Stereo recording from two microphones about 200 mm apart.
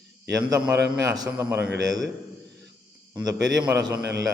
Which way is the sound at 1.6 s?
55° right (ahead or behind).